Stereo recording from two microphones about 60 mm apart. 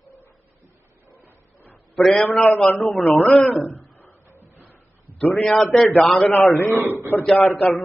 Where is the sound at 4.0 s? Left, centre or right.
Left.